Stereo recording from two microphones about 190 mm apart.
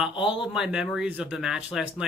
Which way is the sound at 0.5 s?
5° right (ahead or behind).